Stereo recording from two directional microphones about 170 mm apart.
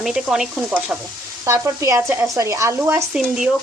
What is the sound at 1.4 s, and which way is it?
Speech, 15° right (ahead or behind).